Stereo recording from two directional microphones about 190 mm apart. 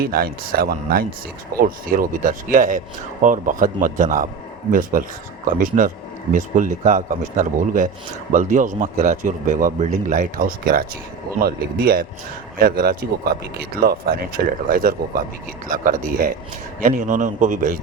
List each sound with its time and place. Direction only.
0.0 s speech: 50° right (ahead or behind)